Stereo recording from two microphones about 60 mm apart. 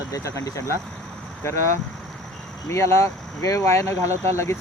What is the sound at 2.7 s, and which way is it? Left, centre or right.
Speech, left.